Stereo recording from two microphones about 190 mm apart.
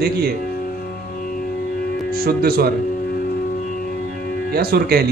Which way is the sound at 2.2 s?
50° right (ahead or behind).